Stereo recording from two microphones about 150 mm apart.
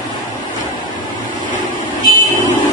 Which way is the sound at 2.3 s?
55° left (ahead or behind).